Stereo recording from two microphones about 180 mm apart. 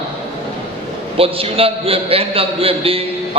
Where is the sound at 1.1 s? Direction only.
30° right (ahead or behind).